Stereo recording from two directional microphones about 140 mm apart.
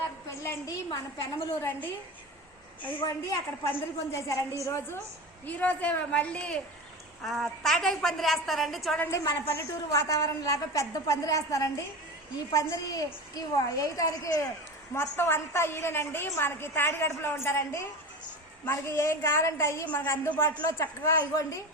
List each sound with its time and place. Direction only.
0.3 s a sound: 20° left (ahead or behind)
0.9 s a woman's voice: 35° left (ahead or behind)
3.0 s a woman's voice: 25° left (ahead or behind)
5.5 s a woman's voice: 10° left (ahead or behind)
9.0 s a woman's voice: 20° left (ahead or behind)